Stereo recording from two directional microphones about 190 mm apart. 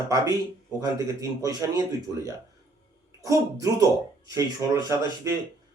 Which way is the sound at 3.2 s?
20° right (ahead or behind).